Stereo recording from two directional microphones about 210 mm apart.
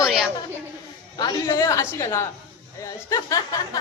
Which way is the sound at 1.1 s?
20° left (ahead or behind).